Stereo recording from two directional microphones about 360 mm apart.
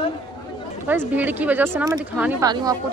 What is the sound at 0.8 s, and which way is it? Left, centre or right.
Speech, centre.